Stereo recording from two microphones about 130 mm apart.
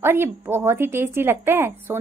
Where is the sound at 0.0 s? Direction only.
20° right (ahead or behind).